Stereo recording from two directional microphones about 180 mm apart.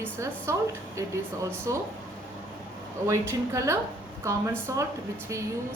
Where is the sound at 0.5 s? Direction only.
15° right (ahead or behind).